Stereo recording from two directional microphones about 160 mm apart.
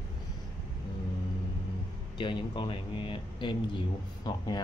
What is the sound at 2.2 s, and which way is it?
Speech, 30° left (ahead or behind).